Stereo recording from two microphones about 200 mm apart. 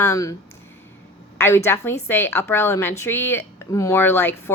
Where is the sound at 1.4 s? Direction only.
10° left (ahead or behind).